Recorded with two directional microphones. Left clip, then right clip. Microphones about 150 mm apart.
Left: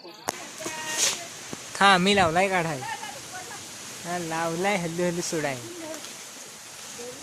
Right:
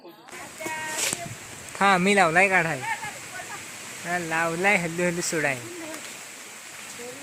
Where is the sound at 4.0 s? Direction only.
Centre (ahead or behind).